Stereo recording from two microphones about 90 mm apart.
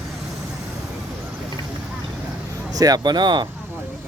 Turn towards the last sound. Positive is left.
turn(degrees=-55)  # may be behind; listen again after turning